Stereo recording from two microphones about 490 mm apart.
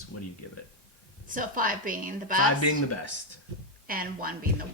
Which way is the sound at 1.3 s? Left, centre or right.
Centre.